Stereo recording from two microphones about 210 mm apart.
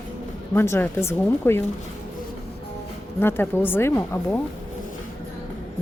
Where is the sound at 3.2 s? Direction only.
10° left (ahead or behind).